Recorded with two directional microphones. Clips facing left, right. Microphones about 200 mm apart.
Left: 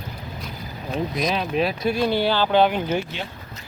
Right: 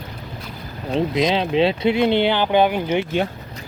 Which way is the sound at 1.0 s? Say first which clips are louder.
Right 5 dB; 25° right (ahead or behind).